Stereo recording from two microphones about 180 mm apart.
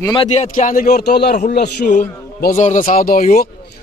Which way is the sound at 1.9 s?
45° left (ahead or behind).